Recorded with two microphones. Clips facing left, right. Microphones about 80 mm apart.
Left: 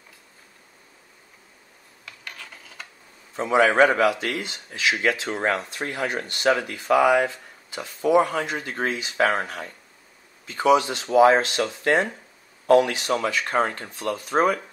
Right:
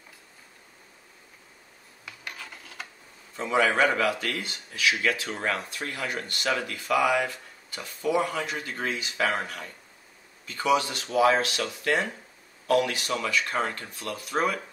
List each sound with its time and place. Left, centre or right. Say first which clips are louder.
2.0 s rub: even; centre
3.3 s a man's voice: left 6 dB; left
8.2 s speech: left 6 dB; left